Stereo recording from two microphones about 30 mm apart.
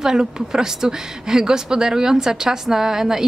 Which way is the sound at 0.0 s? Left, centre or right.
Centre.